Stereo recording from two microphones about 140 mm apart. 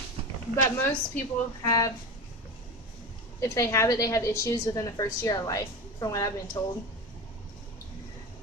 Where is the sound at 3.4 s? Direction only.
20° left (ahead or behind).